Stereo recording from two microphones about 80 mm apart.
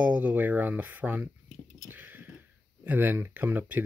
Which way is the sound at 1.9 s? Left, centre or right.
Right.